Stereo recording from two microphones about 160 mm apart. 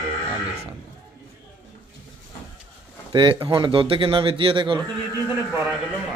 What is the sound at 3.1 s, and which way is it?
A man's voice, 30° right (ahead or behind).